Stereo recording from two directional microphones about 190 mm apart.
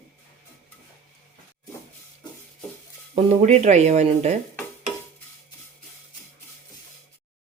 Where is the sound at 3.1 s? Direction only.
35° right (ahead or behind).